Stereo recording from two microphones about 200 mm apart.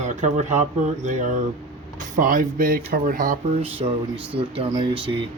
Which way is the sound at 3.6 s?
30° right (ahead or behind).